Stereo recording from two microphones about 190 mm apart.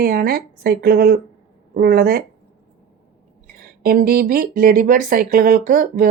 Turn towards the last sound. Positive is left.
turn(degrees=-45)  # may be behind; listen again after turning